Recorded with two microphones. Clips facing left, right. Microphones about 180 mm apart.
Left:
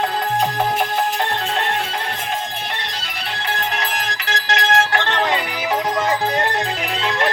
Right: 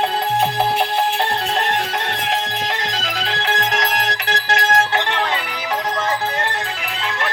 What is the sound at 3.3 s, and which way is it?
Music, 90° right.